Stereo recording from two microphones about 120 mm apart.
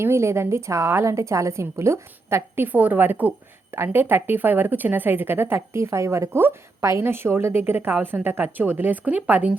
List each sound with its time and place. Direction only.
0.0 s a woman's voice: 20° right (ahead or behind)